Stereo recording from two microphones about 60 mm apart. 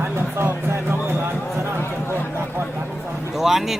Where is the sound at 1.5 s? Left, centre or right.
Right.